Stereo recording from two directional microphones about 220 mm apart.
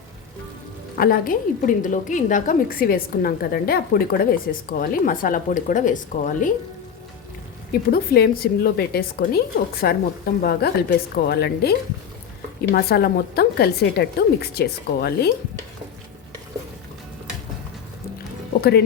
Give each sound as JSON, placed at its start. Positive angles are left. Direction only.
{"t": 0.9, "sound": "a woman's voice", "side_deg": 40}
{"t": 7.7, "sound": "a woman's voice", "side_deg": 45}